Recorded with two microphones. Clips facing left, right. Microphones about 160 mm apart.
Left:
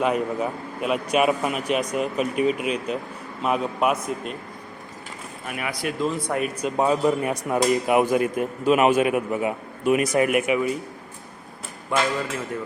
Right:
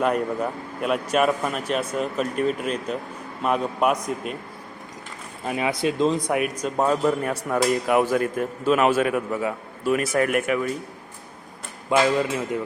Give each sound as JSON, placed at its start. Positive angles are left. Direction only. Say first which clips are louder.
{"t": 0.0, "sound": "a man's voice", "louder": "even", "side_deg": 5}
{"t": 5.5, "sound": "speech", "louder": "right 5 dB", "side_deg": -25}
{"t": 6.6, "sound": "a man's voice", "louder": "left 4 dB", "side_deg": 10}
{"t": 11.9, "sound": "speech", "louder": "right 4 dB", "side_deg": -20}